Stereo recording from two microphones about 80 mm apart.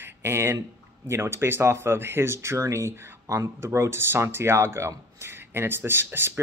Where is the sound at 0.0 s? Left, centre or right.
Right.